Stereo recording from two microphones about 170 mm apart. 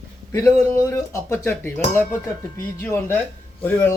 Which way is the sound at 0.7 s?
15° left (ahead or behind).